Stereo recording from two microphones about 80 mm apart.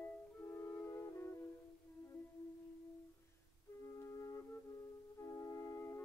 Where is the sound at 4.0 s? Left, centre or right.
Left.